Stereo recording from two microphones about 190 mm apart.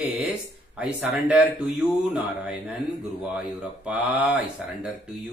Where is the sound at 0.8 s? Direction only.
5° right (ahead or behind).